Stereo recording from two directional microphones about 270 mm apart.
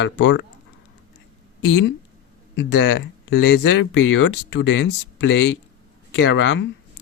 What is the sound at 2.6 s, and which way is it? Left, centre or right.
Speech, left.